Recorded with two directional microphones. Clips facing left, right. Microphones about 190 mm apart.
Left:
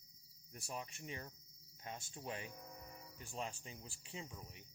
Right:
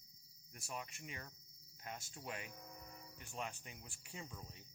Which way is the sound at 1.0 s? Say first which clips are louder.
Left 3 dB; 30° left (ahead or behind).